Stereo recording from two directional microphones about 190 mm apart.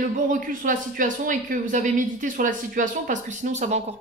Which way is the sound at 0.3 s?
45° right (ahead or behind).